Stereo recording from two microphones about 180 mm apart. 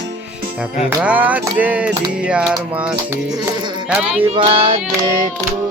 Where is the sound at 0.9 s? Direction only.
10° right (ahead or behind).